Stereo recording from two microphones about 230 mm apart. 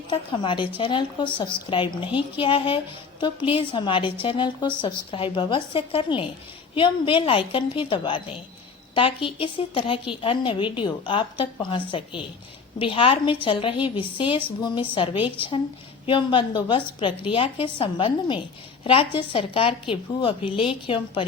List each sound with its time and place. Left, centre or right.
0.1 s a woman's voice: left